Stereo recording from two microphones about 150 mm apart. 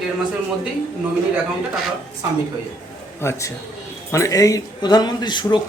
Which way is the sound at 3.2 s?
20° left (ahead or behind).